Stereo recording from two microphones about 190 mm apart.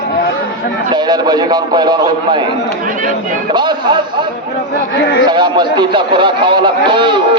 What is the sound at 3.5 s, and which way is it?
Speech, 25° right (ahead or behind).